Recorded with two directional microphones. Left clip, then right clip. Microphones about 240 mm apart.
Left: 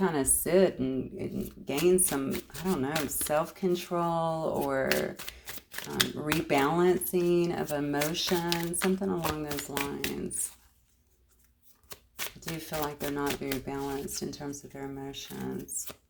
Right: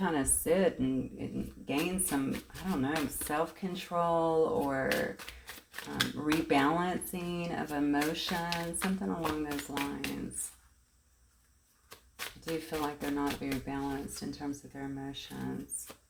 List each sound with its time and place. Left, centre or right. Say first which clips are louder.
0.0 s speech: left 3 dB; left
11.9 s speech: left 3 dB; left